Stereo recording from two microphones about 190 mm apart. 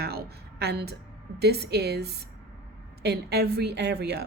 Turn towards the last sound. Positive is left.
turn(degrees=-60)  # may be behind; listen again after turning